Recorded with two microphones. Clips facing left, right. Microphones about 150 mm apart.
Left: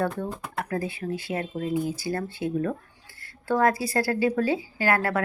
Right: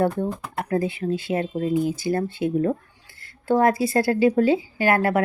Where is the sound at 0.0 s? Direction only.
25° right (ahead or behind).